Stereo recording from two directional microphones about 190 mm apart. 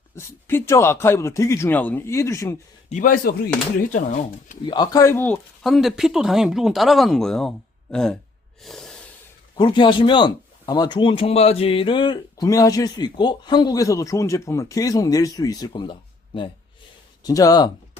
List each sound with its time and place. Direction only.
0.2 s a man's voice: 15° left (ahead or behind)
2.9 s speech: 45° left (ahead or behind)
4.6 s speech: 20° left (ahead or behind); by 8.2 s 5° left (ahead or behind)
8.6 s snort: centre (ahead or behind)
9.6 s speech: 25° left (ahead or behind)